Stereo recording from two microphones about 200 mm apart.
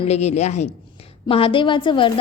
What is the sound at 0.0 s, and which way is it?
A woman's voice, 35° left (ahead or behind).